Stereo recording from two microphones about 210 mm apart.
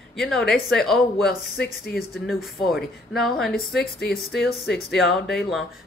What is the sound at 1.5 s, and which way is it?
Speech, 50° left (ahead or behind).